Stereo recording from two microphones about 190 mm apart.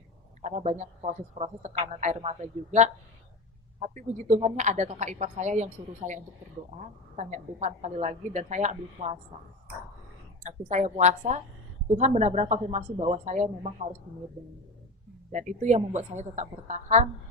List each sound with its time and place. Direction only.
0.4 s a woman's voice: 35° right (ahead or behind)
7.2 s a woman's voice: 40° right (ahead or behind)
10.4 s a woman's voice: 40° right (ahead or behind)
15.3 s a woman's voice: 40° right (ahead or behind)